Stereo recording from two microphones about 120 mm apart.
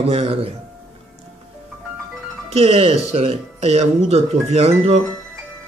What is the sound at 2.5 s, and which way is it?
Speech, 60° right (ahead or behind).